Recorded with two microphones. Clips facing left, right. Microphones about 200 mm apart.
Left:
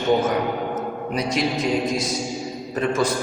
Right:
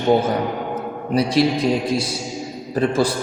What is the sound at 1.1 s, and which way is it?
A man's voice, 30° right (ahead or behind).